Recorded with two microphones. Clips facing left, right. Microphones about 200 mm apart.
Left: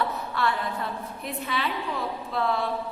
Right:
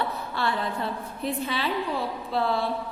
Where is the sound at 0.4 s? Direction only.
30° right (ahead or behind).